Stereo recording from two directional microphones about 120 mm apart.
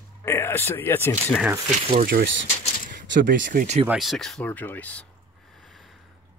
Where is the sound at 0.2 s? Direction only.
20° left (ahead or behind).